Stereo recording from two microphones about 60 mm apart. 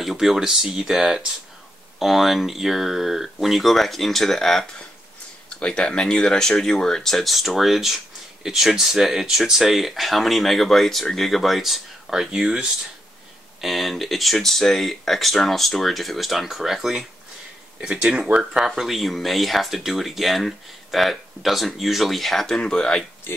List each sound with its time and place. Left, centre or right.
0.0 s speech: centre
13.6 s speech: centre
17.7 s speech: centre
18.6 s speech: centre
22.6 s speech: centre